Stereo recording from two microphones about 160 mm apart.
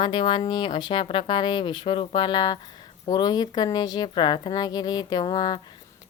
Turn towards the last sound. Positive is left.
turn(degrees=25)  # may be behind; listen again after turning